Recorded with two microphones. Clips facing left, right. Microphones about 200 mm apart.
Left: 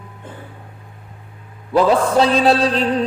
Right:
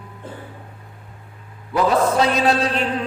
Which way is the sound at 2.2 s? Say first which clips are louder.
Left 4 dB; 30° left (ahead or behind).